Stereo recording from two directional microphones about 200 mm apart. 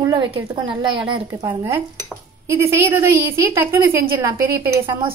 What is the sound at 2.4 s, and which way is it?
A woman's voice, 15° right (ahead or behind).